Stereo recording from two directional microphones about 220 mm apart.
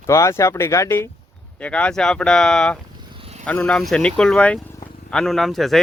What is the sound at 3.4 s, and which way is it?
Speech, 5° left (ahead or behind).